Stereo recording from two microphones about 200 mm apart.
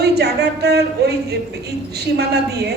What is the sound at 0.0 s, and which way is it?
A woman's voice, 55° right (ahead or behind).